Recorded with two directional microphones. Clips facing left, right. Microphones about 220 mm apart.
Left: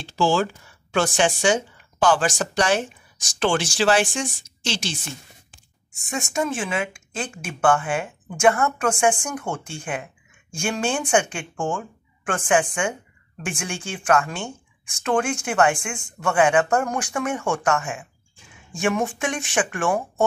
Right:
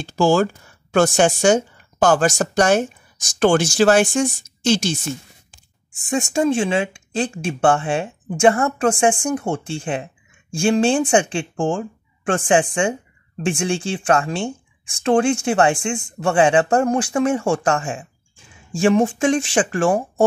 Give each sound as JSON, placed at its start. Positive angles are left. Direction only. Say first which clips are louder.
{"t": 0.0, "sound": "speech", "louder": "right 5 dB", "side_deg": -45}
{"t": 6.0, "sound": "speech", "louder": "right 7 dB", "side_deg": -30}